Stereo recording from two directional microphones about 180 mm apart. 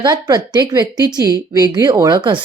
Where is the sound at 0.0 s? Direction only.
20° right (ahead or behind).